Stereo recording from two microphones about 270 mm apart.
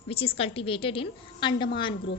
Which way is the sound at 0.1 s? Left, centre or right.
Left.